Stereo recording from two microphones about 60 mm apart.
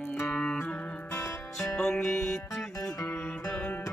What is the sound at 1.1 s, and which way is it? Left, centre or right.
Music, left.